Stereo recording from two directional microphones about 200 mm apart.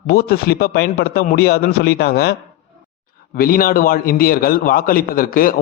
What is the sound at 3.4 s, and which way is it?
A man's voice, 45° left (ahead or behind).